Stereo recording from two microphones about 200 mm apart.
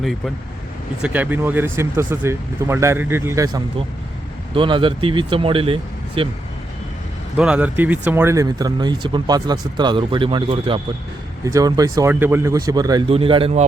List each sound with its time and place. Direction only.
1.0 s speech: 10° right (ahead or behind); by 6.2 s 25° right (ahead or behind)
7.3 s speech: 5° right (ahead or behind); by 13.7 s 30° right (ahead or behind)